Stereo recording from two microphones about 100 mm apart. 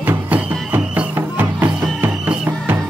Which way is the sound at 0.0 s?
15° right (ahead or behind).